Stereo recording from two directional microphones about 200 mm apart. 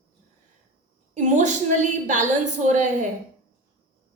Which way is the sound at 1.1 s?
35° right (ahead or behind).